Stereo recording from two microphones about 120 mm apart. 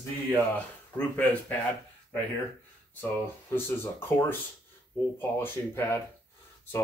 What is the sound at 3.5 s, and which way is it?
Speech, 20° left (ahead or behind).